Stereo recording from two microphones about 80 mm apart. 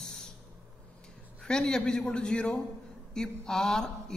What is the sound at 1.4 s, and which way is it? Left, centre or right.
A woman's voice, centre.